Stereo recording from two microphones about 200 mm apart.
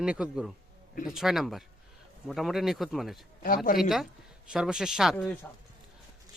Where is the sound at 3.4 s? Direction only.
45° left (ahead or behind).